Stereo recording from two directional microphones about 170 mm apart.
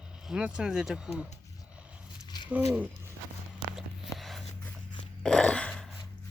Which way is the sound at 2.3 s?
25° left (ahead or behind).